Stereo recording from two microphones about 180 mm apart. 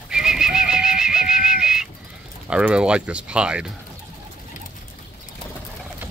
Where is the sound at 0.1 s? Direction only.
5° right (ahead or behind).